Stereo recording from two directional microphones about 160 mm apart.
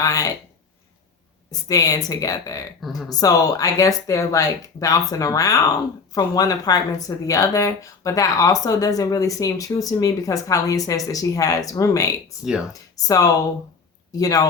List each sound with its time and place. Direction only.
0.0 s speech: 20° left (ahead or behind)
1.5 s speech: 20° left (ahead or behind)